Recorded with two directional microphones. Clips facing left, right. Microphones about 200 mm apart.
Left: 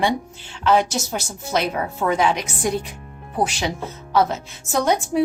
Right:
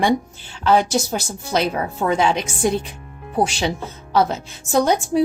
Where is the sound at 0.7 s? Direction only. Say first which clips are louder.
Right 2 dB; 35° right (ahead or behind).